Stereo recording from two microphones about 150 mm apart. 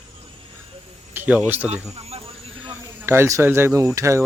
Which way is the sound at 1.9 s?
40° right (ahead or behind).